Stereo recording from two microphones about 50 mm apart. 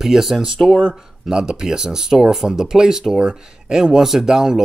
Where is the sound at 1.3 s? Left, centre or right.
Centre.